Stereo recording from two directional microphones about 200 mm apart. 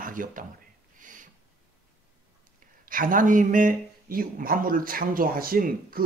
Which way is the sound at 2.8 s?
40° right (ahead or behind).